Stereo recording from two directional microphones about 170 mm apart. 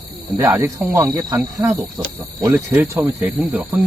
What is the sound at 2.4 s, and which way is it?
Speech, 10° right (ahead or behind).